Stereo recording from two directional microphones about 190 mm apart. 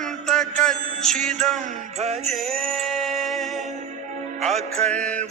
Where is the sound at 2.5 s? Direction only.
Centre (ahead or behind).